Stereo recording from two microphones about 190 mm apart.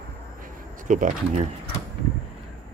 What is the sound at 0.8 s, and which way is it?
Speech, 40° right (ahead or behind).